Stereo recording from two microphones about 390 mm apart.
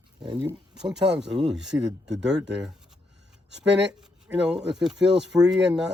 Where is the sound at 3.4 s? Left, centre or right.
Right.